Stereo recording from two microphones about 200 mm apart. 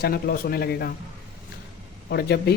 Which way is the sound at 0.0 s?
50° left (ahead or behind).